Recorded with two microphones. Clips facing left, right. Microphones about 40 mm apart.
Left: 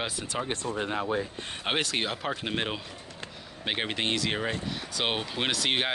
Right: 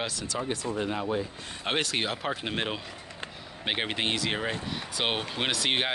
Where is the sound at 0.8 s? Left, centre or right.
Left.